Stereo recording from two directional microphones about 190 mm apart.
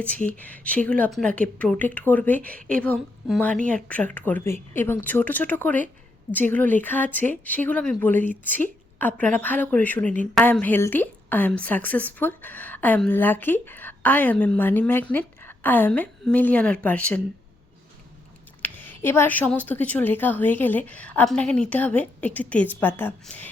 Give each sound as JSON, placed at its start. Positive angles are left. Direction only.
{"t": 0.3, "sound": "a woman's voice", "side_deg": 10}
{"t": 2.6, "sound": "a woman's voice", "side_deg": -45}
{"t": 2.8, "sound": "a woman's voice", "side_deg": 5}
{"t": 18.6, "sound": "a woman's voice", "side_deg": 10}